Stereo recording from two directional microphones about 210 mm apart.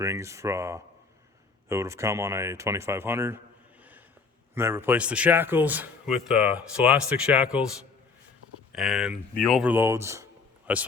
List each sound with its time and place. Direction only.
0.0 s a man's voice: 15° right (ahead or behind)
4.5 s a man's voice: 10° right (ahead or behind)
8.7 s a man's voice: centre (ahead or behind)